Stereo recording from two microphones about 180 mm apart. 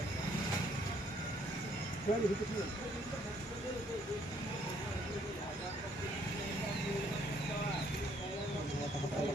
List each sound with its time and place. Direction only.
2.1 s speech: 40° left (ahead or behind)